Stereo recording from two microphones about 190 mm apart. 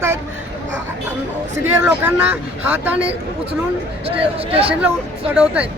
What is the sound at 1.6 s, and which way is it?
Speech, 10° right (ahead or behind).